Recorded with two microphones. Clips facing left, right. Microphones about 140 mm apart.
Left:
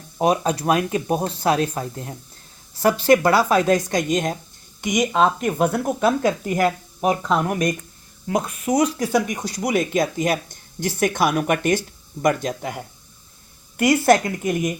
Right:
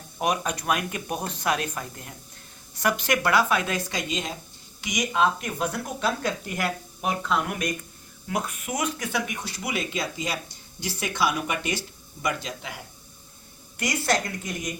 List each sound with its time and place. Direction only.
0.2 s speech: 30° left (ahead or behind); by 14.7 s 55° left (ahead or behind)